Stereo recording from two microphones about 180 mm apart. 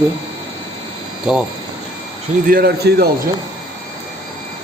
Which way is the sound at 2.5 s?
60° right (ahead or behind).